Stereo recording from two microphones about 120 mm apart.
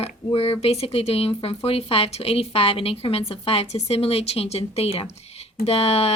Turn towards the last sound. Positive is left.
turn(degrees=60)  # may be behind; listen again after turning